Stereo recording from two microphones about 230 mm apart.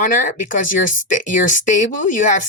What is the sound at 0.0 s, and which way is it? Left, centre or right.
Speech, left.